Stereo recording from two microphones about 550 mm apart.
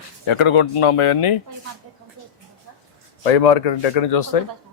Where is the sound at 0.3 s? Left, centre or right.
Left.